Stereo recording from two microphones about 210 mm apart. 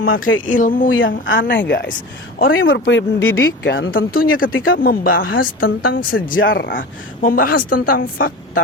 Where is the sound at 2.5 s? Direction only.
70° left (ahead or behind).